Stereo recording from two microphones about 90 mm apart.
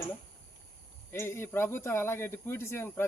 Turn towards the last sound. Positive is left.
turn(degrees=25)  # may be behind; listen again after turning